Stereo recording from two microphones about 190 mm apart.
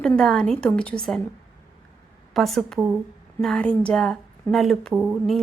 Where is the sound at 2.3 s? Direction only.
Centre (ahead or behind).